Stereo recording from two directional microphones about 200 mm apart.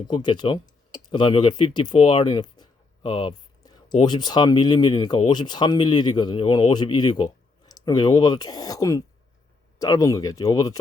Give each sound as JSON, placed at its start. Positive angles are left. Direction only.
{"t": 0.1, "sound": "speech", "side_deg": 20}
{"t": 0.9, "sound": "a sound", "side_deg": 20}
{"t": 4.0, "sound": "speech", "side_deg": 20}